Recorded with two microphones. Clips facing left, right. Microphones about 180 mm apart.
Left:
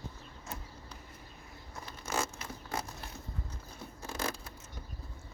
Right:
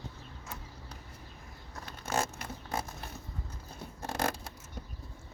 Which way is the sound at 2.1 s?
55° right (ahead or behind).